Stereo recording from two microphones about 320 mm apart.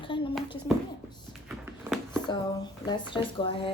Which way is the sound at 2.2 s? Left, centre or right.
Centre.